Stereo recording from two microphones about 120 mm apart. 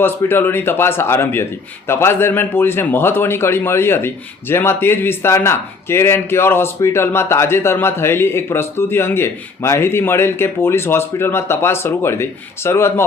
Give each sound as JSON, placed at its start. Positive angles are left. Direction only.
{"t": 0.3, "sound": "a man's voice", "side_deg": 20}